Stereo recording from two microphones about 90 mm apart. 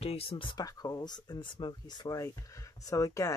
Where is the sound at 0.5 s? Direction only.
45° left (ahead or behind).